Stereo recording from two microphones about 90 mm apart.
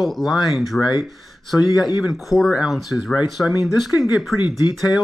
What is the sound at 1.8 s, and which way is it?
Speech, 50° left (ahead or behind).